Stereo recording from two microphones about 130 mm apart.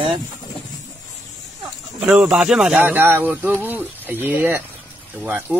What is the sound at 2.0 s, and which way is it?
Speech, 10° right (ahead or behind).